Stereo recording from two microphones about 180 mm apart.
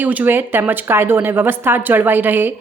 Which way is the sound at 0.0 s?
10° right (ahead or behind).